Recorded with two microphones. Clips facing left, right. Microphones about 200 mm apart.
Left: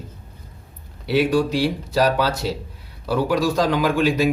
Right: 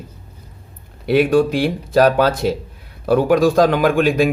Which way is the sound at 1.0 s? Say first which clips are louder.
Right 5 dB; 55° right (ahead or behind).